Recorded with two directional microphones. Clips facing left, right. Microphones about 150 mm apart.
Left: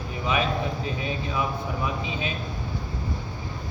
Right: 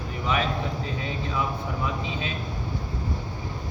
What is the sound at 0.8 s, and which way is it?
Speech, 10° left (ahead or behind).